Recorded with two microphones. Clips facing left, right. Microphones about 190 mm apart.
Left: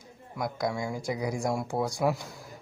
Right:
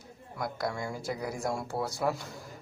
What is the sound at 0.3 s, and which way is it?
Speech, 15° left (ahead or behind).